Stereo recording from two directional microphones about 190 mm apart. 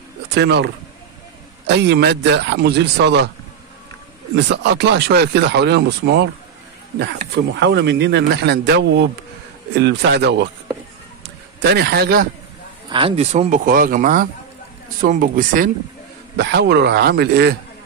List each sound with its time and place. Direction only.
0.3 s speech: 65° right (ahead or behind)
1.7 s speech: 65° right (ahead or behind)
4.5 s speech: 65° right (ahead or behind)
11.6 s speech: 60° right (ahead or behind)
12.9 s speech: 30° right (ahead or behind); by 15.7 s 45° right (ahead or behind)
16.3 s speech: 60° right (ahead or behind)